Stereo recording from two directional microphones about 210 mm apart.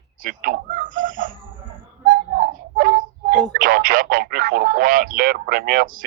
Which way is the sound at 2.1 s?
40° right (ahead or behind).